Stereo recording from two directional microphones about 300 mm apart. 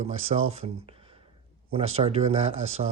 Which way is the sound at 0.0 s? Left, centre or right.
Right.